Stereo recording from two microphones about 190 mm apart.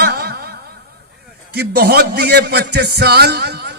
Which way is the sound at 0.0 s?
55° right (ahead or behind).